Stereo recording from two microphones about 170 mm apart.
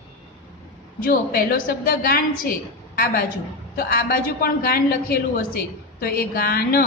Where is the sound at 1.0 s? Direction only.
60° left (ahead or behind).